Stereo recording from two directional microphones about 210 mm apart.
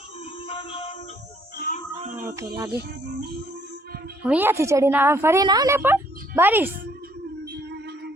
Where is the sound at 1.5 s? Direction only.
45° left (ahead or behind).